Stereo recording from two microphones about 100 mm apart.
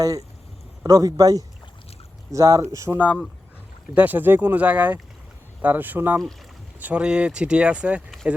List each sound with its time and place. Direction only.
0.0 s a man's voice: 35° right (ahead or behind)
2.9 s speech: 5° right (ahead or behind)
3.9 s speech: 15° right (ahead or behind)